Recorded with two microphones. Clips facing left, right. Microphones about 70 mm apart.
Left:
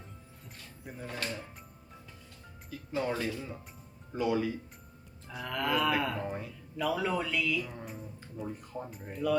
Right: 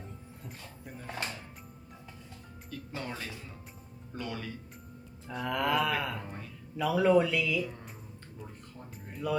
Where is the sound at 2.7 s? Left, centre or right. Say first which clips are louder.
Left 6 dB; centre.